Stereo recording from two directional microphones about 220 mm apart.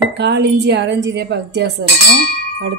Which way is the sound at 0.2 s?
50° right (ahead or behind).